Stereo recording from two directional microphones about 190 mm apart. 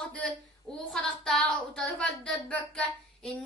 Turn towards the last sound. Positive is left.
turn(degrees=5)  # may be behind; listen again after turning